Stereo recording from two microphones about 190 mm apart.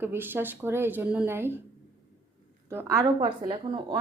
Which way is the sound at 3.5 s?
25° right (ahead or behind).